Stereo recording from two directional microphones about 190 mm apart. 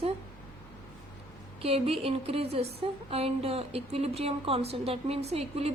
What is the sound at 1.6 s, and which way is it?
A woman's voice, 30° right (ahead or behind).